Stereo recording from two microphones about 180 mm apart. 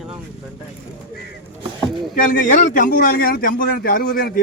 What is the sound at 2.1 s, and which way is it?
A man's voice, 50° left (ahead or behind).